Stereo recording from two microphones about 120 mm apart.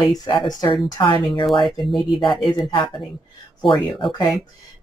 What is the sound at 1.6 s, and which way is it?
Speech, centre (ahead or behind).